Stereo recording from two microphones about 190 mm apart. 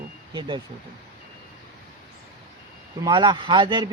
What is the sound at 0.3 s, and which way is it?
Speech, 25° right (ahead or behind).